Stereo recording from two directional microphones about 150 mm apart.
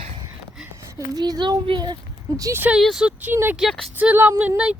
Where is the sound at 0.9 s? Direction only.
25° right (ahead or behind).